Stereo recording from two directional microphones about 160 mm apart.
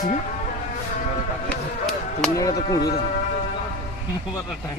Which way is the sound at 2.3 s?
20° left (ahead or behind).